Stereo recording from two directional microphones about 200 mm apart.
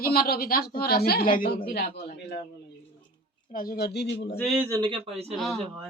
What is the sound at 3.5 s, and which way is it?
Speech, 45° left (ahead or behind).